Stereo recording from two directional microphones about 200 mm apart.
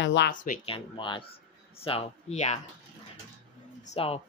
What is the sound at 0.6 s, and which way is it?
Speech, 25° left (ahead or behind).